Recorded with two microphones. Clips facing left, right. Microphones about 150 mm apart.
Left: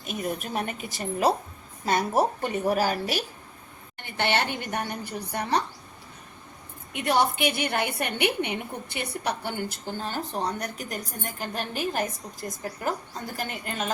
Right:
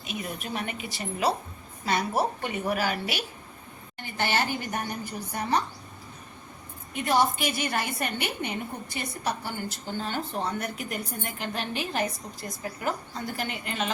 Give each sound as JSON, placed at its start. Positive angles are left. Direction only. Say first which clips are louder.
{"t": 0.0, "sound": "a woman's voice", "louder": "left 4 dB", "side_deg": 45}
{"t": 4.0, "sound": "a woman's voice", "louder": "left 1 dB", "side_deg": 65}
{"t": 6.9, "sound": "a woman's voice", "louder": "even", "side_deg": 65}
{"t": 10.1, "sound": "a woman's voice", "louder": "left 1 dB", "side_deg": 40}